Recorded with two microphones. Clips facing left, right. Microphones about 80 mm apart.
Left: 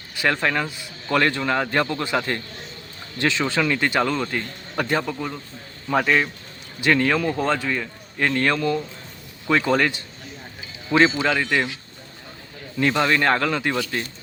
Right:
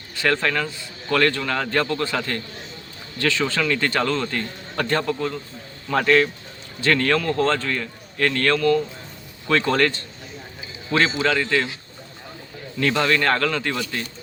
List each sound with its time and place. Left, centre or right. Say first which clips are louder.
0.2 s a man's voice: even; centre
11.2 s a man's voice: right 1 dB; centre
12.8 s a man's voice: left 1 dB; centre